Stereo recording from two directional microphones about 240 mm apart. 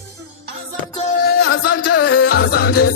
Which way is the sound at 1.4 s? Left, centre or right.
Left.